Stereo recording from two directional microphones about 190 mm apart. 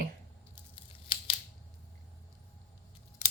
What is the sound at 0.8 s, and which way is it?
Scissors, 25° left (ahead or behind).